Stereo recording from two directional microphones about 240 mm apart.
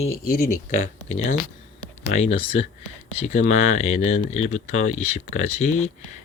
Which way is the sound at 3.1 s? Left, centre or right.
Left.